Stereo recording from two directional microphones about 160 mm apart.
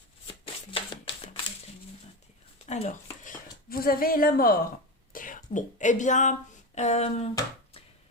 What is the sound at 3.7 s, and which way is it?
A woman's voice, 65° left (ahead or behind).